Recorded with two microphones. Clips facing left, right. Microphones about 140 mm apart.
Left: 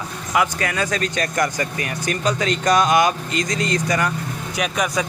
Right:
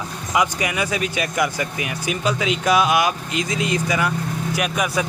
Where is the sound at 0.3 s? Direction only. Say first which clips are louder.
Even; 15° right (ahead or behind).